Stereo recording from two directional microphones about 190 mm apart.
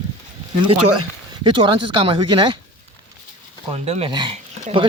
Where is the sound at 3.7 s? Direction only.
35° right (ahead or behind).